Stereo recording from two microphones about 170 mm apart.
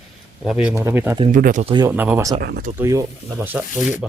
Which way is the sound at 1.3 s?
50° right (ahead or behind).